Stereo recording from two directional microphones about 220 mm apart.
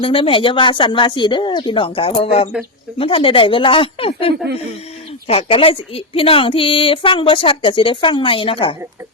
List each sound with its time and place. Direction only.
0.0 s a woman's voice: 25° left (ahead or behind)